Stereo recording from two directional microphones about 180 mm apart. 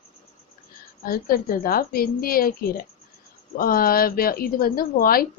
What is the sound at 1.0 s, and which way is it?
A woman's voice, 55° left (ahead or behind).